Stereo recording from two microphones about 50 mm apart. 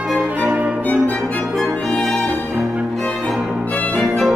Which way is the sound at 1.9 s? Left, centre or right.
Centre.